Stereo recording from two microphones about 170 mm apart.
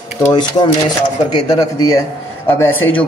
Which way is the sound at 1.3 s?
20° left (ahead or behind).